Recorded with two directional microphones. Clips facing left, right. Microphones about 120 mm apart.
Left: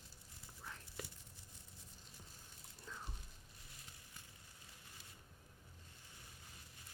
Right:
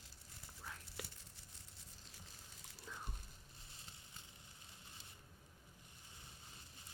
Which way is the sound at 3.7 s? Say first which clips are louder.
Even; 30° right (ahead or behind).